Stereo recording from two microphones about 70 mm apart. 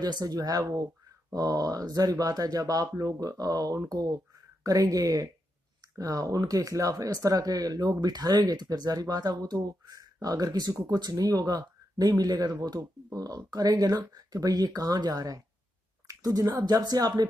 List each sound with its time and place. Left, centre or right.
0.0 s speech: right
16.1 s a sound: right
16.7 s speech: right